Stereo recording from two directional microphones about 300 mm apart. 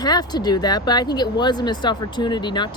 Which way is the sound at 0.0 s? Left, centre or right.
Centre.